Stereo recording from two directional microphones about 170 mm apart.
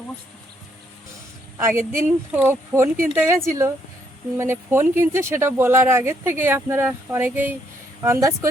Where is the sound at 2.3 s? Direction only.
10° right (ahead or behind).